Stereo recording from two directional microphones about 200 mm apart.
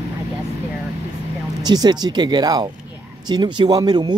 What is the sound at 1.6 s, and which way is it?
Speech, 20° right (ahead or behind).